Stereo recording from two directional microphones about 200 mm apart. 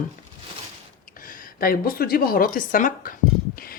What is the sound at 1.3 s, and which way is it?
Speech, 45° left (ahead or behind).